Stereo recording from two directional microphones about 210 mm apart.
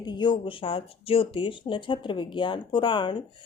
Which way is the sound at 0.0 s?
20° left (ahead or behind).